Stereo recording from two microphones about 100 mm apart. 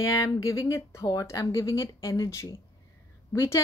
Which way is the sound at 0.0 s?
30° left (ahead or behind).